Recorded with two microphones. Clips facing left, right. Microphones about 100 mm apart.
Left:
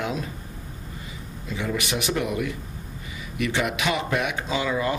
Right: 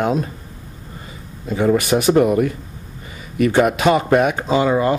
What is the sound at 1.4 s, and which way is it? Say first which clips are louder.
Speech: right 12 dB; 45° right (ahead or behind).